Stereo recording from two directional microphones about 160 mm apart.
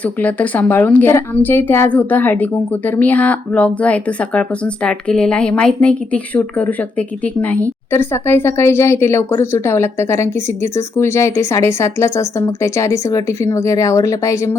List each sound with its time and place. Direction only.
0.0 s a woman's voice: 10° left (ahead or behind)